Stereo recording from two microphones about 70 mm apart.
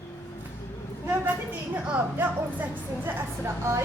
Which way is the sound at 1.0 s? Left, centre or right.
Right.